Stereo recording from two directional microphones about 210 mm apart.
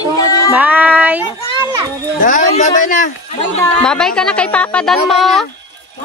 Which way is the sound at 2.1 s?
40° left (ahead or behind).